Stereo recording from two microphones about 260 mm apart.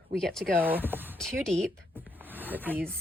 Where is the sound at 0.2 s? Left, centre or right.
Centre.